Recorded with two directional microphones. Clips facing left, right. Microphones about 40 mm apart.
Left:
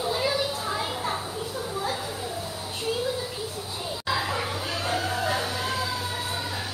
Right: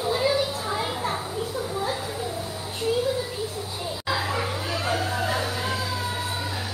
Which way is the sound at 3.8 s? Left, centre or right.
Centre.